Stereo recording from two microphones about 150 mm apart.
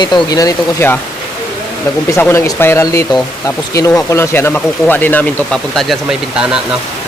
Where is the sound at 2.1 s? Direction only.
15° left (ahead or behind).